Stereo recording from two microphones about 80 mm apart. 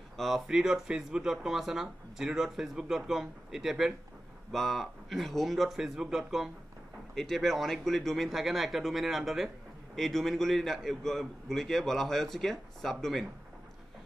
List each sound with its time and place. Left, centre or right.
0.2 s speech: centre